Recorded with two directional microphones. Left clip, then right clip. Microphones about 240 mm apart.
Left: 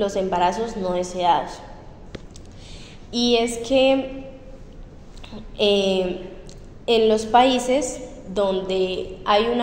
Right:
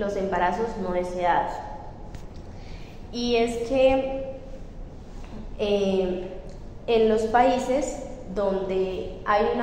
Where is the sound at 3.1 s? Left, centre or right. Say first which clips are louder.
Left 4 dB; left.